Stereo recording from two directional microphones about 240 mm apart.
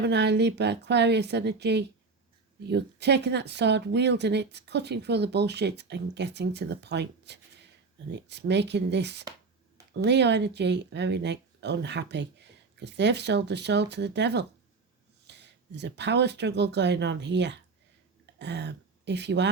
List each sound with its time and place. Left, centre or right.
0.0 s speech: right